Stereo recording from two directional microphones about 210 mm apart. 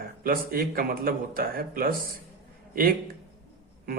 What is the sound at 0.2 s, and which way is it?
Speech, 45° right (ahead or behind).